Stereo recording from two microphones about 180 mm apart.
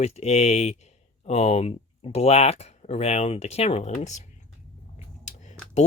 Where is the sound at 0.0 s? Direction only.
35° left (ahead or behind).